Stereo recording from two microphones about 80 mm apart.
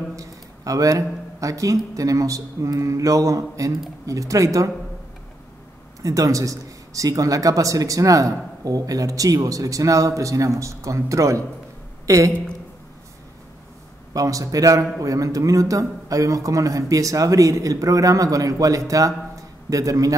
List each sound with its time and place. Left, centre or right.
0.1 s a man's voice: right
6.0 s a man's voice: right
14.1 s a man's voice: right